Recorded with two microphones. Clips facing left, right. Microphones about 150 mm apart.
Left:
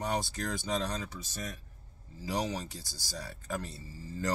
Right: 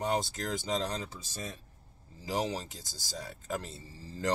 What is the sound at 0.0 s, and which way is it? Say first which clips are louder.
Speech: right 2 dB; 20° right (ahead or behind).